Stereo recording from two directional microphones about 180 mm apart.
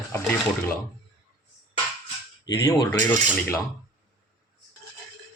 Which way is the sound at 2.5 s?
20° left (ahead or behind).